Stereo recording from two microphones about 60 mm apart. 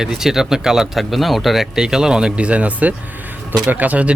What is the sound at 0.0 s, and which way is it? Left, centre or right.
A man's voice, centre.